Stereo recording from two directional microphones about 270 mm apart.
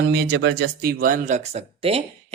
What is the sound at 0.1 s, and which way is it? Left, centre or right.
Speech, right.